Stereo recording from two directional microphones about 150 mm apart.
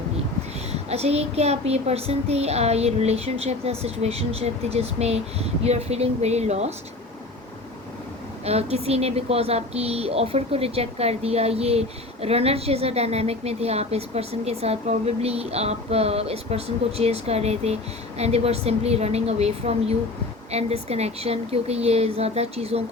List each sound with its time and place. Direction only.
0.7 s speech: 45° right (ahead or behind)
8.4 s speech: 45° right (ahead or behind)